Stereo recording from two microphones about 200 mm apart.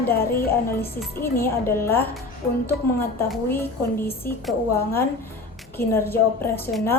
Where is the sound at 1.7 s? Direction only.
10° left (ahead or behind).